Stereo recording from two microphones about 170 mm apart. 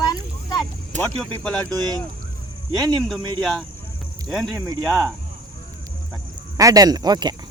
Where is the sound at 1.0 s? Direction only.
10° left (ahead or behind).